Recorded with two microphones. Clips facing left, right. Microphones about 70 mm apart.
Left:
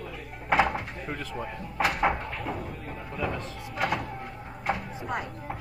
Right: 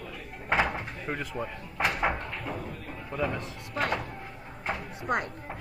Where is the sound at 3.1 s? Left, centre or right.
Right.